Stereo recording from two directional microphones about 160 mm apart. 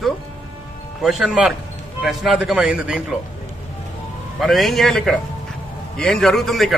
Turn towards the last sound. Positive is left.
turn(degrees=0)  # may be behind; listen again after turning